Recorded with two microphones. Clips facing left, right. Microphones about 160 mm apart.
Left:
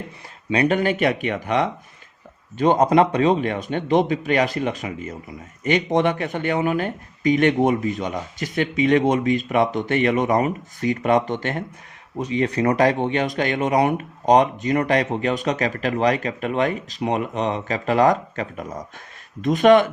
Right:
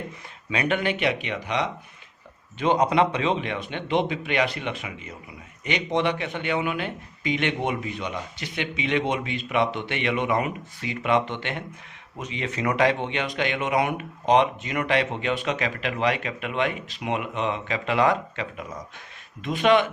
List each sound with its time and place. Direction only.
0.5 s a man's voice: 40° left (ahead or behind)